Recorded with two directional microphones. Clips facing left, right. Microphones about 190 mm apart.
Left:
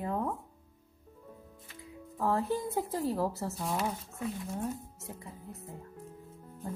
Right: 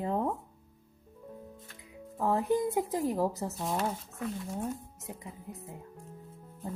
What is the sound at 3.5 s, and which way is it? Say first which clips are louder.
Speech: right 1 dB; centre (ahead or behind).